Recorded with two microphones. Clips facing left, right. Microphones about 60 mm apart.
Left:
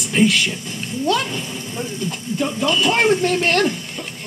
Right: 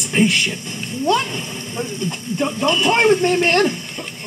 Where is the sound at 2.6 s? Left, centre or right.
Right.